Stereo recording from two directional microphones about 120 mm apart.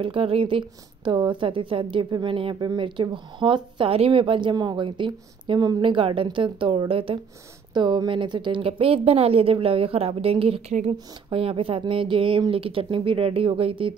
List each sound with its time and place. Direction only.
0.0 s a woman's voice: 50° right (ahead or behind)
7.7 s a woman's voice: 40° right (ahead or behind)